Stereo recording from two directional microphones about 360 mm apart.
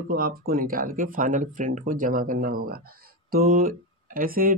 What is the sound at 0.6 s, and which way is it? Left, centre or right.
Speech, right.